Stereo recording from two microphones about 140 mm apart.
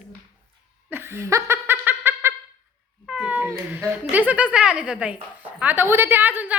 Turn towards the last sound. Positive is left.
turn(degrees=-15)  # may be behind; listen again after turning